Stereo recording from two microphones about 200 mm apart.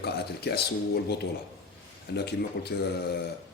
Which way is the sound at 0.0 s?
55° left (ahead or behind).